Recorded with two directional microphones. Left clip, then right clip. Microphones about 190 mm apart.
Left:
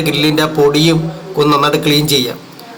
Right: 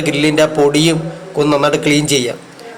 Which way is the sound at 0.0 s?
20° right (ahead or behind).